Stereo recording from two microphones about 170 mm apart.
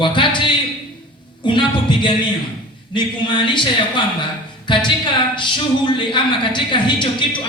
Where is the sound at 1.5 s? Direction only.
30° left (ahead or behind).